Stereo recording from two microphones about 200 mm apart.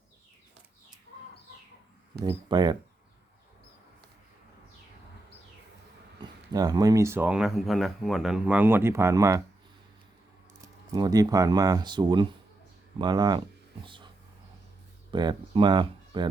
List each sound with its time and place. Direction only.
2.2 s speech: 20° right (ahead or behind)
6.5 s speech: 20° right (ahead or behind)
10.9 s speech: 20° right (ahead or behind)
15.1 s speech: 20° right (ahead or behind)